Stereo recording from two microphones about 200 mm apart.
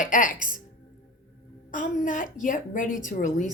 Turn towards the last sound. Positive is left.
turn(degrees=40)  # may be behind; listen again after turning